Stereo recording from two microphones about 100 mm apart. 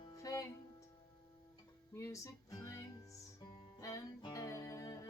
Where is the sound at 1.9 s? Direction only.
30° left (ahead or behind).